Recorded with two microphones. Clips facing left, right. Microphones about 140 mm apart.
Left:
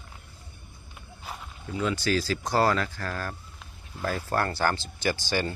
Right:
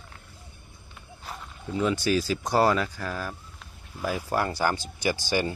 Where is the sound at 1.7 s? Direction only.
15° right (ahead or behind).